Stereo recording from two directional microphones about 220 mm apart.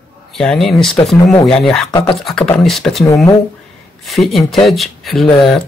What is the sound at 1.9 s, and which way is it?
Speech, 20° left (ahead or behind).